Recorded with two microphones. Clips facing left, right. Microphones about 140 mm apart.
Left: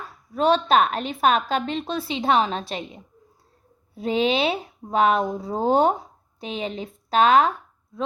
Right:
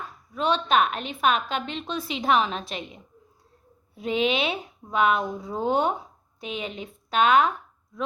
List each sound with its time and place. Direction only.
0.3 s speech: 40° left (ahead or behind)